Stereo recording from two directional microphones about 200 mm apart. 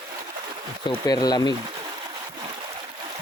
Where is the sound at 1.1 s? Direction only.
20° left (ahead or behind).